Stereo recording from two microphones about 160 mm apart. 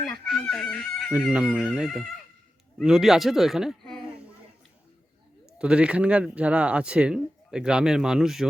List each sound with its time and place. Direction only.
0.0 s chicken: 5° left (ahead or behind)
1.2 s speech: 5° right (ahead or behind)
5.5 s speech: 5° right (ahead or behind)